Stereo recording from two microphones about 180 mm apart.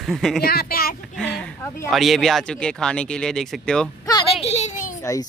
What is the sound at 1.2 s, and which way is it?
Speech, 5° left (ahead or behind).